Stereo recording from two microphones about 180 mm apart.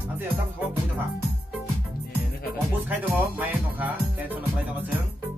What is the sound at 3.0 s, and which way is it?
Music, 10° right (ahead or behind).